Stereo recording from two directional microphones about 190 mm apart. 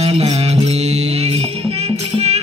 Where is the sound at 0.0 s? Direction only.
35° right (ahead or behind).